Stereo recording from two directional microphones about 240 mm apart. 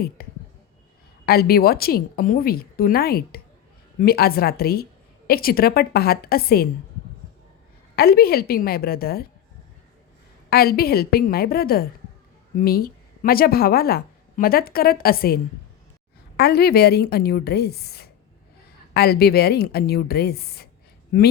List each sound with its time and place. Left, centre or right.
0.2 s a sound: left
1.2 s a woman's voice: left
7.9 s a woman's voice: left
10.5 s a woman's voice: left
16.4 s a woman's voice: left